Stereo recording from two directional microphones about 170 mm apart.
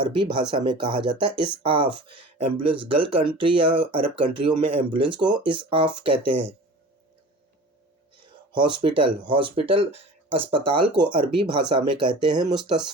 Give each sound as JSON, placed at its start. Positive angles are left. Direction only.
{"t": 0.0, "sound": "speech", "side_deg": -30}
{"t": 8.5, "sound": "speech", "side_deg": -25}